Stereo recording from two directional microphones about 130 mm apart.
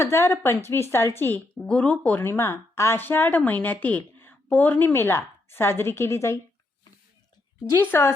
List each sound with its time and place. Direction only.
0.0 s a woman's voice: 20° left (ahead or behind)
7.8 s a woman's voice: 15° left (ahead or behind)